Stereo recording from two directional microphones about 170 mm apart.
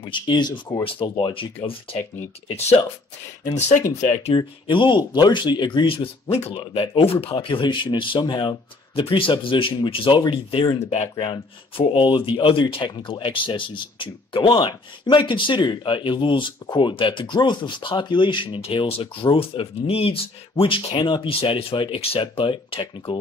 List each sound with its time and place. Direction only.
0.0 s speech: 30° left (ahead or behind)
4.4 s speech: 30° left (ahead or behind)